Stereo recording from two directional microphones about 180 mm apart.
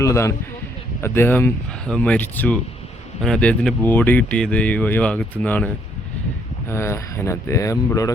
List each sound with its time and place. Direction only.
0.0 s speech: 15° left (ahead or behind)